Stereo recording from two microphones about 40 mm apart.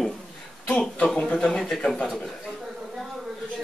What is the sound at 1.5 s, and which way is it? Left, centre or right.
Speech, centre.